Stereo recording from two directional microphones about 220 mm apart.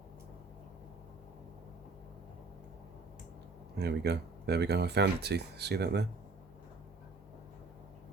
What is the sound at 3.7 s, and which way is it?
Speech, 50° right (ahead or behind).